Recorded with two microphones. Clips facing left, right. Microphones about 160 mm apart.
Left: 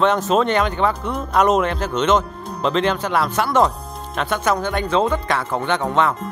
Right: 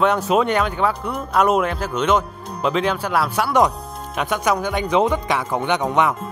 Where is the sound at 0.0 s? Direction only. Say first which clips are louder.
Left 1 dB; 10° right (ahead or behind).